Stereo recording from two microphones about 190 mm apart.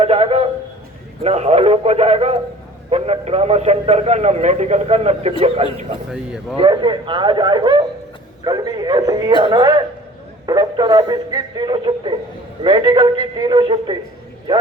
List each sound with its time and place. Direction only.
0.0 s a man's voice: 30° right (ahead or behind)
6.1 s speech: centre (ahead or behind)
6.6 s speech: 25° right (ahead or behind)